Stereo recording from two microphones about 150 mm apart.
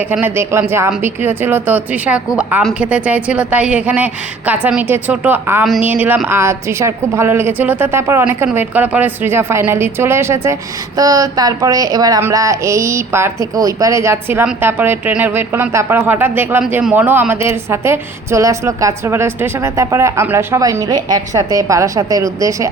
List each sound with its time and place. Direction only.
0.0 s a woman's voice: 10° right (ahead or behind)